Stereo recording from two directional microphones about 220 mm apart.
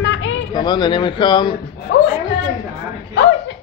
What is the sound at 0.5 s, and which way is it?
Speech, 20° left (ahead or behind).